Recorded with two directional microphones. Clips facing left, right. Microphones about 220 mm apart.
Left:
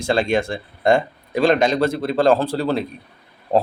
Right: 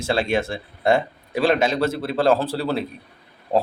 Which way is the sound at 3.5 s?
20° left (ahead or behind).